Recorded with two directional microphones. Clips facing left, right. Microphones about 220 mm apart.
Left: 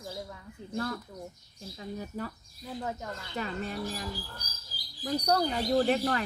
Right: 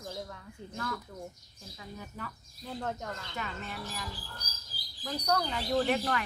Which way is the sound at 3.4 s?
35° left (ahead or behind).